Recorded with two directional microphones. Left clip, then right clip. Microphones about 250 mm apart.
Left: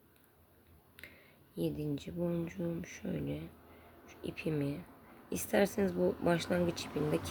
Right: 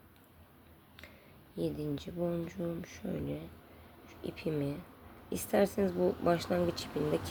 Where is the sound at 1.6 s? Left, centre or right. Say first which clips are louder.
Right 1 dB; centre.